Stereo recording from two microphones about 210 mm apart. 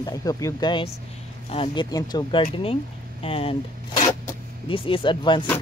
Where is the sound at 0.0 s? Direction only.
15° left (ahead or behind).